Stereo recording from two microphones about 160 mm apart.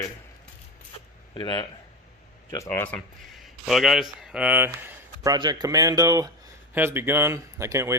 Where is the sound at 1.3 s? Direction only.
25° left (ahead or behind).